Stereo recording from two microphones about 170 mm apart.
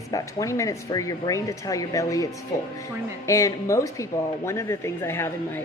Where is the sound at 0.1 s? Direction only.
20° left (ahead or behind).